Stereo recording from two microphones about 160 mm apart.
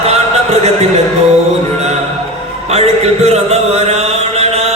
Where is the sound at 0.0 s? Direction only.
40° right (ahead or behind).